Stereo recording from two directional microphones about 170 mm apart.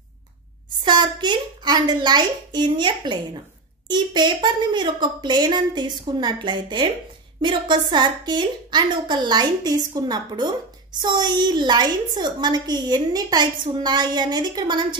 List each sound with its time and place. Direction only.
0.8 s a woman's voice: 25° right (ahead or behind)